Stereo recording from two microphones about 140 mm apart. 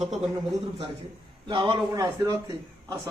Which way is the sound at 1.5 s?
35° right (ahead or behind).